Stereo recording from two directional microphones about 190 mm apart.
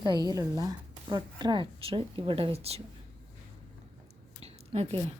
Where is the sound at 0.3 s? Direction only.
20° right (ahead or behind).